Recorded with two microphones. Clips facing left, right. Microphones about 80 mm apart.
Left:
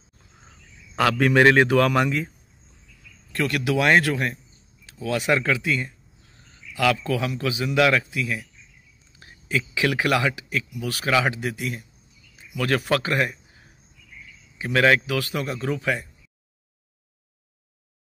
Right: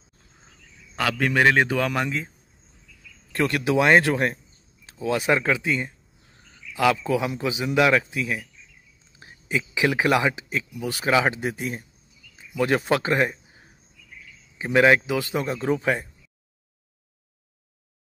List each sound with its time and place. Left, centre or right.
0.9 s speech: centre
3.3 s speech: right